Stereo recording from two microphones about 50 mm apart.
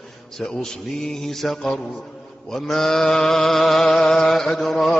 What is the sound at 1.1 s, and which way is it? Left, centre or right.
Mantra, centre.